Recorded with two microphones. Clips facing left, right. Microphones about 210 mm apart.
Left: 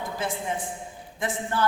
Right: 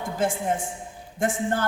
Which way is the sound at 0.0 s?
45° right (ahead or behind).